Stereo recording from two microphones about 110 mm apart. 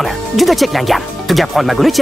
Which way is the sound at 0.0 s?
Centre (ahead or behind).